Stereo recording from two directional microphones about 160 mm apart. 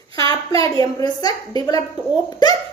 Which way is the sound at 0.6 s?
35° right (ahead or behind).